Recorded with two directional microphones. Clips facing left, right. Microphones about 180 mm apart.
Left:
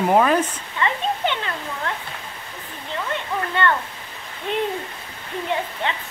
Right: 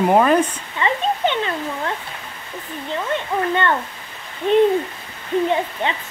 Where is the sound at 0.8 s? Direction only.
20° right (ahead or behind).